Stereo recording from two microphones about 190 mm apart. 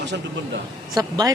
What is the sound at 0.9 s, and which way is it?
Speech, 20° right (ahead or behind).